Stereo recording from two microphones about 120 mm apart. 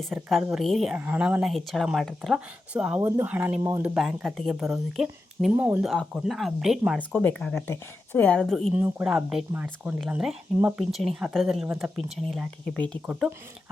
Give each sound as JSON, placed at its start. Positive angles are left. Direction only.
{"t": 0.0, "sound": "speech", "side_deg": 0}
{"t": 0.9, "sound": "speech", "side_deg": -15}
{"t": 2.7, "sound": "speech", "side_deg": -10}
{"t": 3.0, "sound": "speech", "side_deg": -20}
{"t": 3.9, "sound": "speech", "side_deg": -5}
{"t": 7.1, "sound": "a woman's voice", "side_deg": 15}
{"t": 8.7, "sound": "a woman's voice", "side_deg": -15}
{"t": 13.1, "sound": "speech", "side_deg": -5}